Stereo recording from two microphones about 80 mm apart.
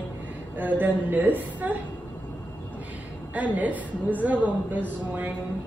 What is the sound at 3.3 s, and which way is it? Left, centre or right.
A woman's voice, centre.